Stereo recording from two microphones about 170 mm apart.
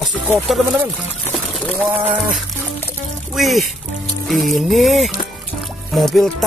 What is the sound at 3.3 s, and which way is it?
Speech, centre (ahead or behind).